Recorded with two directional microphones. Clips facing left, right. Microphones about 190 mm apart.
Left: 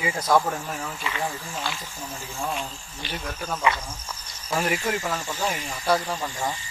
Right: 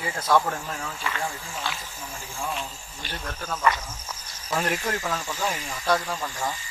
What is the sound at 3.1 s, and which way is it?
Speech, 5° left (ahead or behind).